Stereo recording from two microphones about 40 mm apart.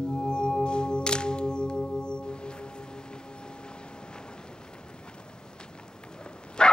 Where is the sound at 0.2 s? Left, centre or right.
Left.